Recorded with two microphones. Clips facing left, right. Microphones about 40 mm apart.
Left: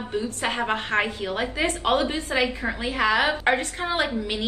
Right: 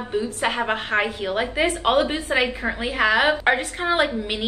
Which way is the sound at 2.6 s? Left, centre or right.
Centre.